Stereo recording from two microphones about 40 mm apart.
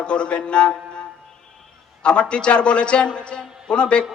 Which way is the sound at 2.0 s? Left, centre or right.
Left.